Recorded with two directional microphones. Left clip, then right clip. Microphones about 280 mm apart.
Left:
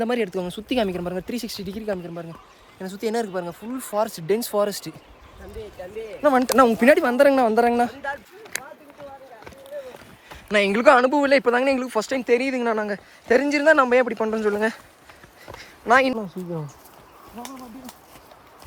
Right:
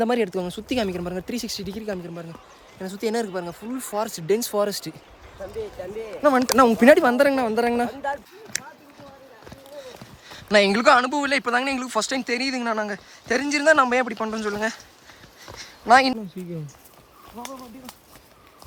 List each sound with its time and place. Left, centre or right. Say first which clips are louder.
0.0 s speech: right 1 dB; centre
5.5 s speech: right 2 dB; right
6.2 s speech: even; centre
7.3 s speech: left 4 dB; centre
10.3 s speech: right 2 dB; centre